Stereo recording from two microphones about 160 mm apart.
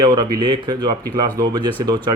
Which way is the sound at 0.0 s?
25° right (ahead or behind).